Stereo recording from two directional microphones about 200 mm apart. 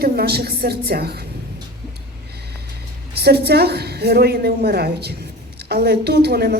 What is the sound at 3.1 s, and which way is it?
A woman's voice, 55° right (ahead or behind).